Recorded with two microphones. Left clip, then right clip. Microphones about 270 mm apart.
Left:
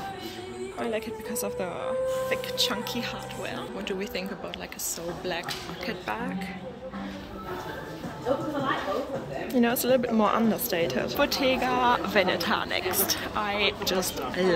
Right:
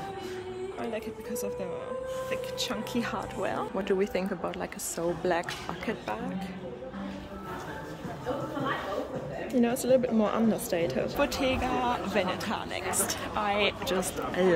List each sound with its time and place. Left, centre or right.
0.9 s speech: centre
2.9 s speech: centre
9.5 s a woman's voice: centre